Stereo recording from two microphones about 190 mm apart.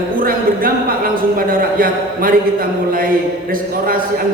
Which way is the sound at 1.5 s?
50° right (ahead or behind).